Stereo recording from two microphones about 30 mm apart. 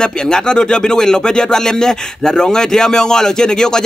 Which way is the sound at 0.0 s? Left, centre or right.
Left.